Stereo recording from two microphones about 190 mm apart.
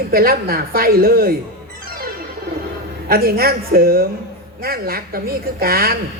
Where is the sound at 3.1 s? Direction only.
50° right (ahead or behind).